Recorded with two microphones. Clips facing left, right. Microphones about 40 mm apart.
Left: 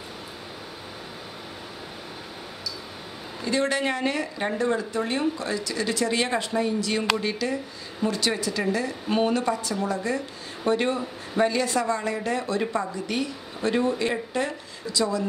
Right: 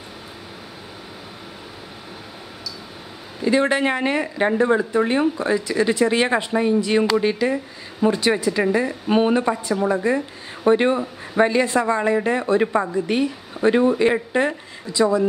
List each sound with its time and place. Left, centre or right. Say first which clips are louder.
3.4 s speech: right 6 dB; right